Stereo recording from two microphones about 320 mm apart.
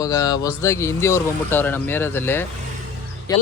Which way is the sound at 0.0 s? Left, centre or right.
Centre.